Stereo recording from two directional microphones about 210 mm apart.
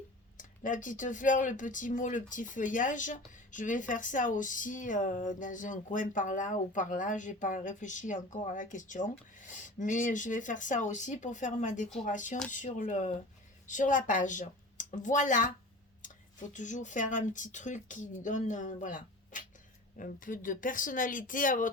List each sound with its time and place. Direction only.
0.3 s speech: 40° left (ahead or behind)